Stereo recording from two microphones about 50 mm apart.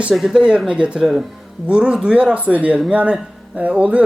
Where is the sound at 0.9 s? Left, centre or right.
Centre.